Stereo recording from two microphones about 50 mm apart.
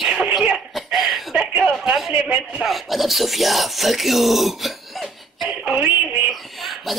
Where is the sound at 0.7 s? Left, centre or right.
Centre.